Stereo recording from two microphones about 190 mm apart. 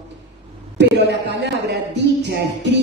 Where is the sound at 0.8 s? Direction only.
65° right (ahead or behind).